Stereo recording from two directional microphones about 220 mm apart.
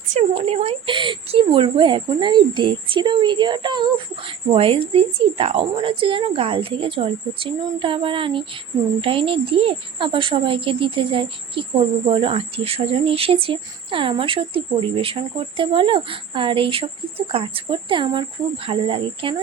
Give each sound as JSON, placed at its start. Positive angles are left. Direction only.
{"t": 0.1, "sound": "speech", "side_deg": -30}